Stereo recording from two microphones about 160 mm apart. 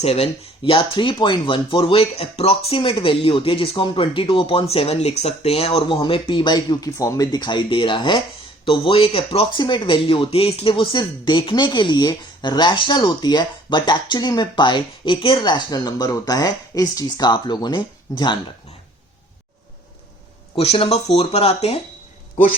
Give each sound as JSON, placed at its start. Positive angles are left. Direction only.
{"t": 0.0, "sound": "speech", "side_deg": 40}
{"t": 20.6, "sound": "speech", "side_deg": 35}